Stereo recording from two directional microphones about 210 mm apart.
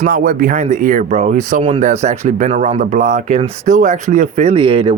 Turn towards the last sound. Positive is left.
turn(degrees=-25)  # may be behind; listen again after turning